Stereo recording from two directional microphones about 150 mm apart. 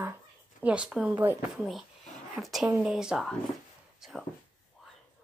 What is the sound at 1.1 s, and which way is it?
Speech, 15° right (ahead or behind).